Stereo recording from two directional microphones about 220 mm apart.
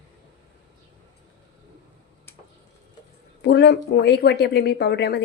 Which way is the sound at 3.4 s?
50° left (ahead or behind).